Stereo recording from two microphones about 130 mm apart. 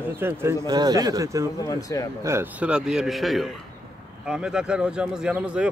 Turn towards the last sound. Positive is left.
turn(degrees=-10)  # may be behind; listen again after turning